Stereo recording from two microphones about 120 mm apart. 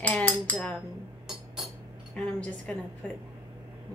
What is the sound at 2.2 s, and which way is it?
Speech, 10° left (ahead or behind).